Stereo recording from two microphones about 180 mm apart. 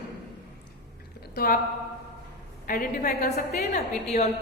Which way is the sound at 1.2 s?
55° left (ahead or behind).